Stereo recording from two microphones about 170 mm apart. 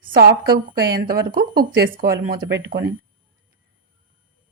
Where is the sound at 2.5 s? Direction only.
90° right.